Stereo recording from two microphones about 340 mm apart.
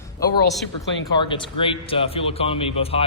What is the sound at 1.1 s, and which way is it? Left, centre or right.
A man's voice, centre.